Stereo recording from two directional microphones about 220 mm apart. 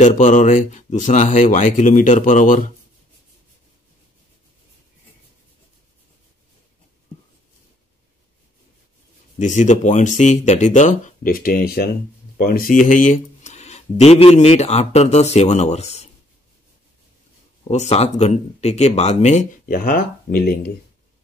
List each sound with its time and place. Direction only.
0.0 s speech: 35° left (ahead or behind)
9.4 s speech: 35° left (ahead or behind)
17.6 s speech: 30° left (ahead or behind)